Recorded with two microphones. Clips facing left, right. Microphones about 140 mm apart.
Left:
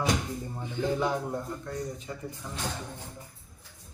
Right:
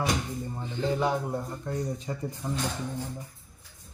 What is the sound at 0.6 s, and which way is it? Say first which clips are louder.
Speech: left 1 dB; 10° left (ahead or behind).